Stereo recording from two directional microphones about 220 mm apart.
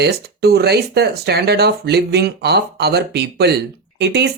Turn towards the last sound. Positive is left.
turn(degrees=-50)  # may be behind; listen again after turning